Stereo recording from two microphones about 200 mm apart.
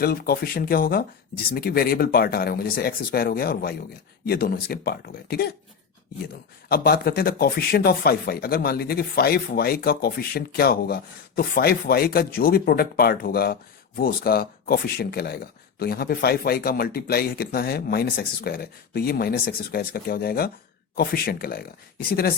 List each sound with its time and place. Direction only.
0.0 s speech: 50° left (ahead or behind)
6.7 s speech: 50° left (ahead or behind)